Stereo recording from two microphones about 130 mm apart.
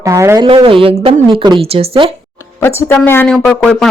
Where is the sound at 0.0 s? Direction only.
25° right (ahead or behind).